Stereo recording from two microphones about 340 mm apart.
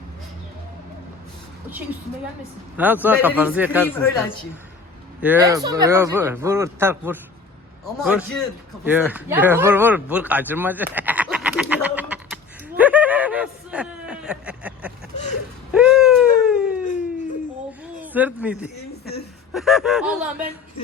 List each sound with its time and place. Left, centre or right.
2.7 s speech: centre
3.8 s speech: centre
5.2 s a man's voice: centre
15.7 s a sound: centre
18.0 s a man's voice: centre
18.8 s speech: left
19.5 s speech: centre